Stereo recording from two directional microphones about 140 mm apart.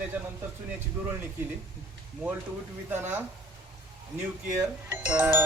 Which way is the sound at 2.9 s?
15° right (ahead or behind).